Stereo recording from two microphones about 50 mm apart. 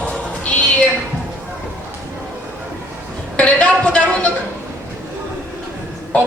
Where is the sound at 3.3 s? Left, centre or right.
Left.